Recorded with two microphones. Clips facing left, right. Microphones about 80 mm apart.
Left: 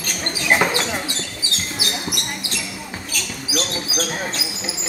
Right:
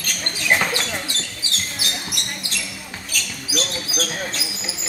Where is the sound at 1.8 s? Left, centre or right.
Centre.